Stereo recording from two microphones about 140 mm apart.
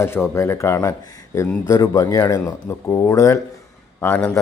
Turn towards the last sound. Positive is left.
turn(degrees=10)  # may be behind; listen again after turning